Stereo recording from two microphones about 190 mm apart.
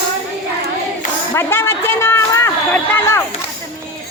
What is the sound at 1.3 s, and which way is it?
A man's voice, 10° left (ahead or behind).